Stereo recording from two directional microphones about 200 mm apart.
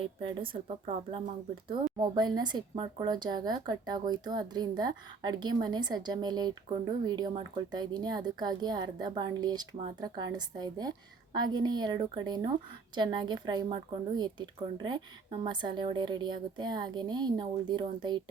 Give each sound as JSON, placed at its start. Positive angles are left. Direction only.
{"t": 0.0, "sound": "a woman's voice", "side_deg": -25}